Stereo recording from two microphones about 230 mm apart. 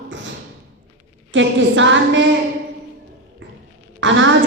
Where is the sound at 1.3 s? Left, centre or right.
Right.